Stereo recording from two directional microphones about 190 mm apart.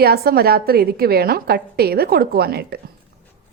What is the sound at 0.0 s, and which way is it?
A woman's voice, 55° right (ahead or behind).